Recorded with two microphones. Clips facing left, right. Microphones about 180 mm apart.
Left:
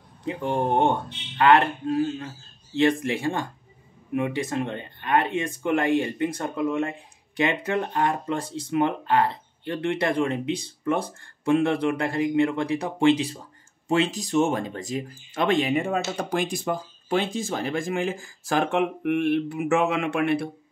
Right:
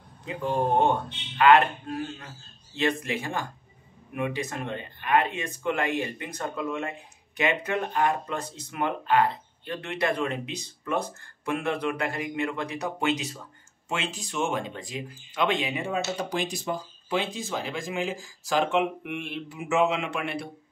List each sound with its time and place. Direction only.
0.3 s speech: 25° left (ahead or behind); by 20.4 s 55° left (ahead or behind)